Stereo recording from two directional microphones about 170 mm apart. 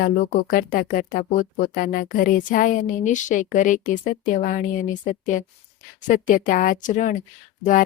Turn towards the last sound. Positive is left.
turn(degrees=50)  # may be behind; listen again after turning